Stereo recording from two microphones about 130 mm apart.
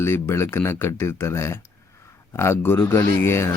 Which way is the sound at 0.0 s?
20° left (ahead or behind).